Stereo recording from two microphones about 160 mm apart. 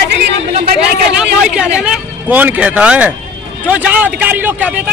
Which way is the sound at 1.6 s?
5° right (ahead or behind).